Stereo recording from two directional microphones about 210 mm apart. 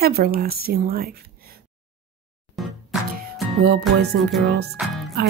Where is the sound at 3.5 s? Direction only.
45° right (ahead or behind).